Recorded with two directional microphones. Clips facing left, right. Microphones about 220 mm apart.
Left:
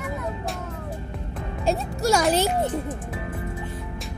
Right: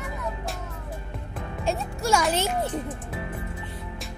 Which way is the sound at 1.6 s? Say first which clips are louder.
Left 3 dB; 35° left (ahead or behind).